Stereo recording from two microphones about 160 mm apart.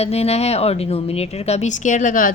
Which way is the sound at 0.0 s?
40° left (ahead or behind).